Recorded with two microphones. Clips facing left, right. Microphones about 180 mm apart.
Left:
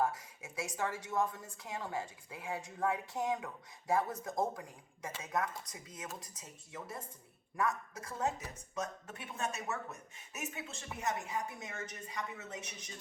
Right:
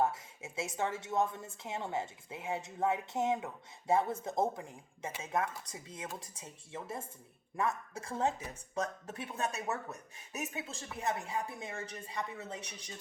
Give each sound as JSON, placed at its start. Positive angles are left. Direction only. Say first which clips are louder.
{"t": 0.0, "sound": "a woman's voice", "louder": "right 2 dB", "side_deg": -25}